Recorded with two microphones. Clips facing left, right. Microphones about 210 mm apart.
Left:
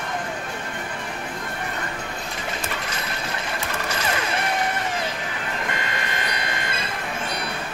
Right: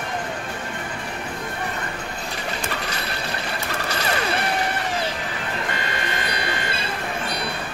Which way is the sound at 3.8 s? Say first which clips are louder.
Right 3 dB; 35° right (ahead or behind).